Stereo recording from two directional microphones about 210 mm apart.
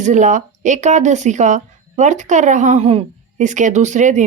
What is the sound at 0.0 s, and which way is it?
Speech, 35° right (ahead or behind).